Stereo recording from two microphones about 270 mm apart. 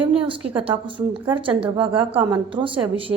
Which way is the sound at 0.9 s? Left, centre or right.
Centre.